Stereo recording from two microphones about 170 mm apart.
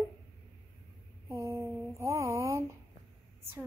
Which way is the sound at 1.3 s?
15° right (ahead or behind).